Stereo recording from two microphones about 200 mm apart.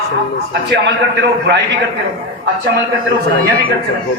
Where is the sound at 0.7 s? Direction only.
60° right (ahead or behind).